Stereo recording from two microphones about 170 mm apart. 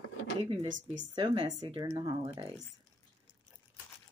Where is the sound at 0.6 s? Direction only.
50° right (ahead or behind).